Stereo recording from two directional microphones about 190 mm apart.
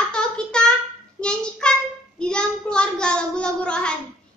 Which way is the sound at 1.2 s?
5° left (ahead or behind).